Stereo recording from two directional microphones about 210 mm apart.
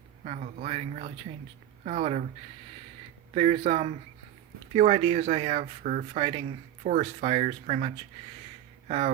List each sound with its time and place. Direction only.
0.3 s speech: 35° right (ahead or behind)
3.3 s speech: 30° right (ahead or behind)